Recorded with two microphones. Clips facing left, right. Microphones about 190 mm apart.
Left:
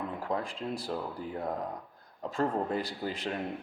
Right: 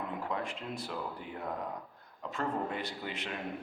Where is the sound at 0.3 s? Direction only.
35° left (ahead or behind).